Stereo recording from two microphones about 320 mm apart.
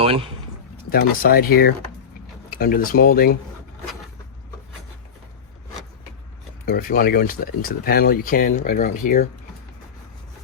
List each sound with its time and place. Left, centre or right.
0.0 s speech: centre
0.9 s speech: left
6.7 s speech: left